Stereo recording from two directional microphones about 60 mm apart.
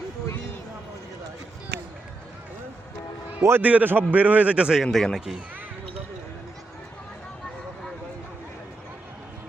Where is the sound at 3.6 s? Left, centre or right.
Right.